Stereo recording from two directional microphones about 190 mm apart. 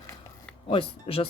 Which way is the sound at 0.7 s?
30° left (ahead or behind).